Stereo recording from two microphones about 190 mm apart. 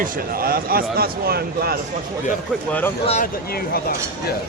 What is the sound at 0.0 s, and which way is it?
A man's voice, 50° right (ahead or behind).